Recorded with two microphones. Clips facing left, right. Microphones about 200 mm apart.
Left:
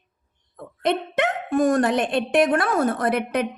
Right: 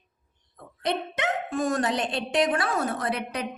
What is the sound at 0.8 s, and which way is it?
A woman's voice, 55° left (ahead or behind).